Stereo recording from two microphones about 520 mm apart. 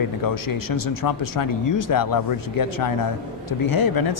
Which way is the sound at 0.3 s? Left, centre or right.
Left.